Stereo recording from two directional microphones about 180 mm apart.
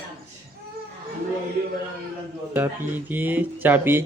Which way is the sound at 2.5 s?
10° right (ahead or behind).